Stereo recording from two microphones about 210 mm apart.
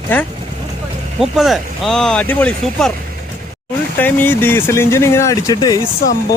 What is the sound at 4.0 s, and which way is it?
Speech, 10° left (ahead or behind).